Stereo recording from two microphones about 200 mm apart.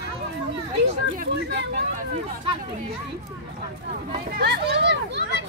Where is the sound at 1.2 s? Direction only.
55° right (ahead or behind).